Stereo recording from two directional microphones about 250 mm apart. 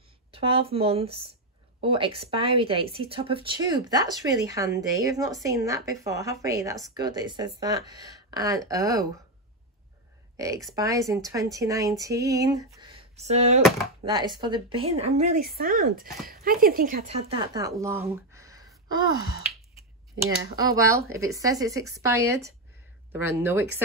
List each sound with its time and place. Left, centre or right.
0.3 s speech: right
10.3 s speech: centre
20.7 s speech: centre